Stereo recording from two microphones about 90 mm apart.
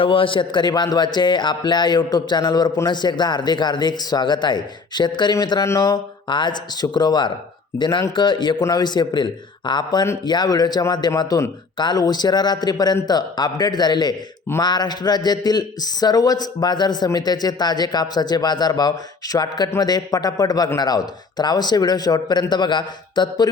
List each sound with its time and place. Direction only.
0.0 s a man's voice: 80° left; by 6.0 s 40° left (ahead or behind)
6.2 s a man's voice: 60° left (ahead or behind)